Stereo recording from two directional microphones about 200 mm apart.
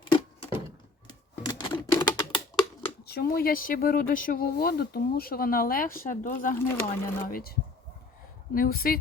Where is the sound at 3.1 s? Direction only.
50° left (ahead or behind).